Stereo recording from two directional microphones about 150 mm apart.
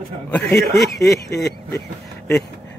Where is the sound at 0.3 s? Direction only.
10° left (ahead or behind).